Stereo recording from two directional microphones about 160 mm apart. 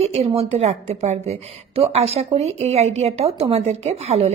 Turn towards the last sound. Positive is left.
turn(degrees=-40)  # may be behind; listen again after turning